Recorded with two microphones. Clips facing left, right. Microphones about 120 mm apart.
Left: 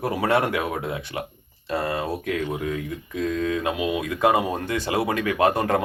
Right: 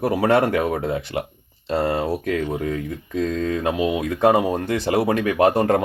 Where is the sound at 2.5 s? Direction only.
40° right (ahead or behind).